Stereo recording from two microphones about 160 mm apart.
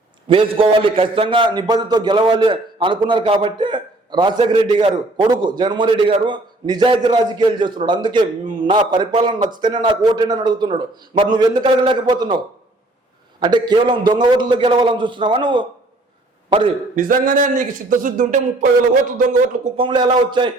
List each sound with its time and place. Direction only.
0.3 s a man's voice: 35° right (ahead or behind)
13.4 s a man's voice: 30° right (ahead or behind)
16.9 s speech: 60° right (ahead or behind)
19.7 s a man's voice: 30° right (ahead or behind)